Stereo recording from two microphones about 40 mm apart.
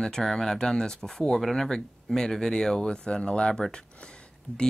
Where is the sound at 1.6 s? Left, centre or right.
Centre.